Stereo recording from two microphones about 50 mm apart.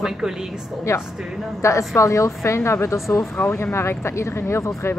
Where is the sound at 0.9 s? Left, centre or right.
Left.